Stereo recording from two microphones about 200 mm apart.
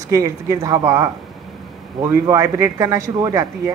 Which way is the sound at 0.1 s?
15° right (ahead or behind).